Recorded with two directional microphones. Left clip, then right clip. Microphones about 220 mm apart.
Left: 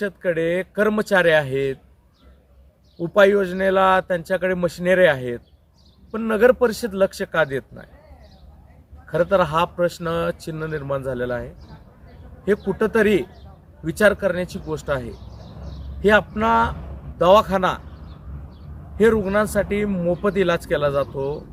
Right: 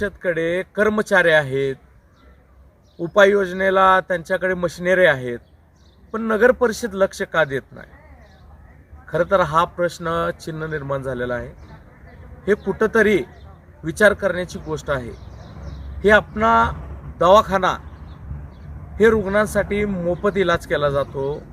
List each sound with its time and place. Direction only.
0.0 s a man's voice: centre (ahead or behind)
3.0 s a man's voice: centre (ahead or behind)
9.0 s a man's voice: centre (ahead or behind)
12.5 s a man's voice: centre (ahead or behind)
18.9 s a man's voice: centre (ahead or behind)